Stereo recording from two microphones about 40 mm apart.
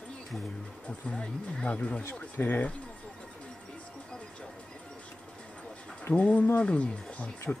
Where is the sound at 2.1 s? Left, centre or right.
Left.